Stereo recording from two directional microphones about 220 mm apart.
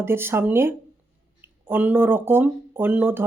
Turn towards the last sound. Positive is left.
turn(degrees=-10)  # may be behind; listen again after turning